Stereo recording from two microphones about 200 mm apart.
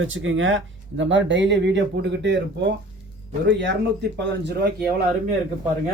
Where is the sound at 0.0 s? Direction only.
75° right (ahead or behind); by 4.7 s 55° right (ahead or behind).